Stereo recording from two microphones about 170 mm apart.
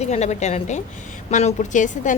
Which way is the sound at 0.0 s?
40° left (ahead or behind).